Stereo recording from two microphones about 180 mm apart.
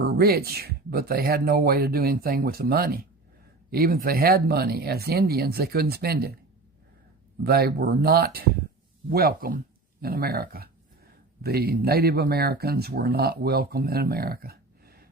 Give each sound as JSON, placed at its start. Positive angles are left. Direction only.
{"t": 0.0, "sound": "speech", "side_deg": -60}
{"t": 7.4, "sound": "speech", "side_deg": -60}